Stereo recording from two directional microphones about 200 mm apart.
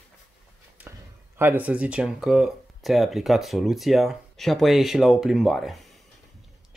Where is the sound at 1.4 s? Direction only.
10° right (ahead or behind).